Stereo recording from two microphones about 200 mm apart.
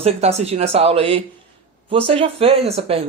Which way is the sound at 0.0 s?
30° right (ahead or behind).